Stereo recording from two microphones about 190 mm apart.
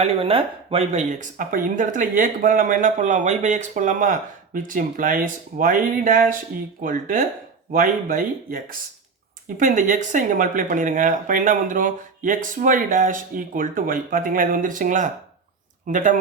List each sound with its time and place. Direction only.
0.0 s speech: 30° right (ahead or behind)